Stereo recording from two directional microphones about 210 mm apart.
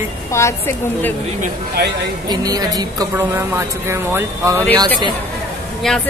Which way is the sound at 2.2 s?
20° right (ahead or behind).